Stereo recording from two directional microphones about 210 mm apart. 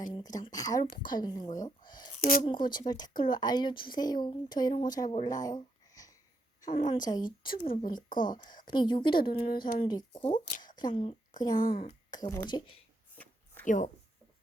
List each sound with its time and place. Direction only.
0.1 s a woman's voice: 20° left (ahead or behind)
2.1 s speech: 40° left (ahead or behind)
2.7 s speech: 20° left (ahead or behind)
5.1 s a sound: 20° left (ahead or behind)
6.6 s a woman's voice: 20° left (ahead or behind)
7.9 s speech: 40° left (ahead or behind)
8.6 s speech: 20° left (ahead or behind)
9.3 s speech: 45° left (ahead or behind)
9.8 s a woman's voice: 25° left (ahead or behind)
11.7 s speech: 45° left (ahead or behind)
12.1 s speech: 15° left (ahead or behind)
13.1 s a sound: 10° left (ahead or behind)
13.7 s speech: 35° left (ahead or behind)